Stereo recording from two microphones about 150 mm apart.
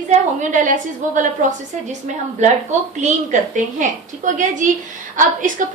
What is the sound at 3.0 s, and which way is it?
A woman's voice, 55° right (ahead or behind).